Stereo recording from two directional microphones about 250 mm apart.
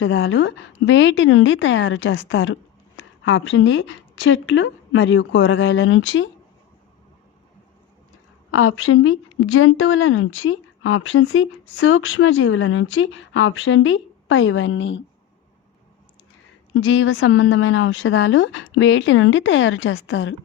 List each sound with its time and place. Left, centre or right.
0.0 s speech: left
8.4 s speech: left
16.7 s speech: left